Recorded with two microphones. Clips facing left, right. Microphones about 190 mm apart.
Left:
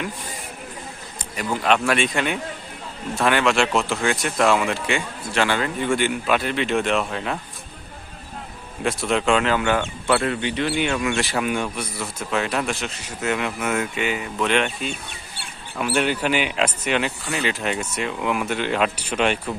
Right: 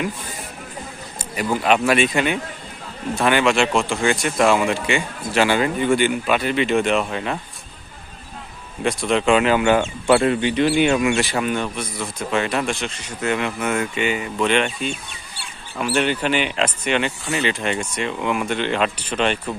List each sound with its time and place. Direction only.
1.4 s speech: 5° right (ahead or behind)
5.8 s speech: centre (ahead or behind)
8.8 s speech: centre (ahead or behind); by 11.1 s 15° right (ahead or behind)
11.2 s speech: centre (ahead or behind)